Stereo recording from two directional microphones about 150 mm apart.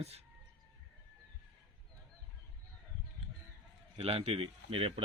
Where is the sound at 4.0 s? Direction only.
40° right (ahead or behind).